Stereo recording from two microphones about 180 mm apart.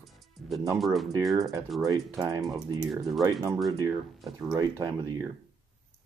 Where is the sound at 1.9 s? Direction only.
20° right (ahead or behind).